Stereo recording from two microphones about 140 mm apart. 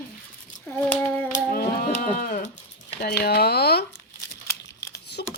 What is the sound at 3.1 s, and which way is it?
Speech, 90° left.